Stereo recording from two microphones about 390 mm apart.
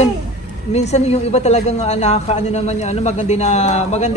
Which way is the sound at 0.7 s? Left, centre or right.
Centre.